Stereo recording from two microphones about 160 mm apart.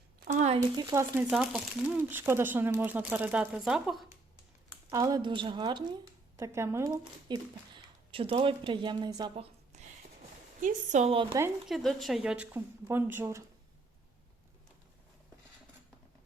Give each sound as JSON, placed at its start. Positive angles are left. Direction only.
{"t": 0.3, "sound": "a sound", "side_deg": -50}
{"t": 0.5, "sound": "speech", "side_deg": -25}
{"t": 1.1, "sound": "speech", "side_deg": -10}
{"t": 4.7, "sound": "speech", "side_deg": -20}
{"t": 6.3, "sound": "speech", "side_deg": -15}
{"t": 9.3, "sound": "a sound", "side_deg": -40}
{"t": 10.6, "sound": "a woman's voice", "side_deg": -55}
{"t": 11.1, "sound": "speech", "side_deg": -30}
{"t": 11.7, "sound": "speech", "side_deg": 0}